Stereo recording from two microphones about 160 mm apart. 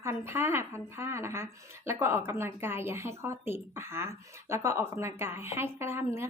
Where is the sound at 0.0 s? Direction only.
15° right (ahead or behind).